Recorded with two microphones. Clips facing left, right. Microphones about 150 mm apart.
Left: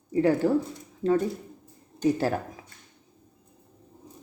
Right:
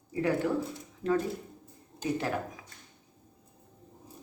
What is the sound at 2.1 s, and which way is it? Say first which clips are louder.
Speech: left 5 dB; 35° left (ahead or behind).